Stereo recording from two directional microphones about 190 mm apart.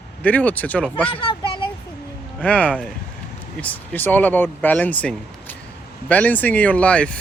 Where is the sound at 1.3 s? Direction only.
25° left (ahead or behind).